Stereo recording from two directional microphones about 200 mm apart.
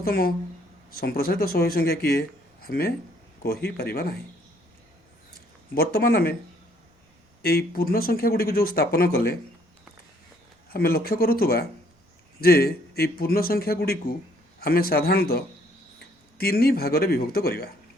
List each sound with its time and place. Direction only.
0.0 s speech: 50° left (ahead or behind)
5.7 s speech: 50° left (ahead or behind)
7.4 s speech: 50° left (ahead or behind)
10.7 s speech: 50° left (ahead or behind)